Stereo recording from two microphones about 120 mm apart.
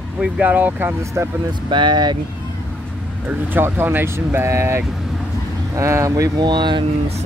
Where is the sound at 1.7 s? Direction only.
40° right (ahead or behind).